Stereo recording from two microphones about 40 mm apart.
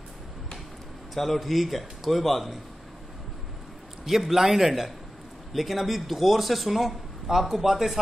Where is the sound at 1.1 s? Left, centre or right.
Centre.